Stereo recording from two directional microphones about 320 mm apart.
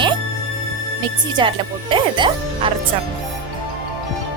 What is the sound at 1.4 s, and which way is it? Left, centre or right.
Speech, centre.